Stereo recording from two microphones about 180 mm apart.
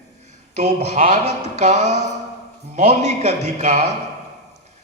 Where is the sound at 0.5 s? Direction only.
40° right (ahead or behind).